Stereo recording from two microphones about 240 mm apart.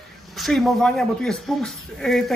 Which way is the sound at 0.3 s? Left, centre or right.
Centre.